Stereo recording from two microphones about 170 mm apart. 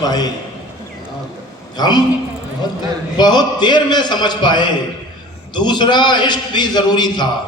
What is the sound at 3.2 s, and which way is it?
A man's voice, 25° left (ahead or behind).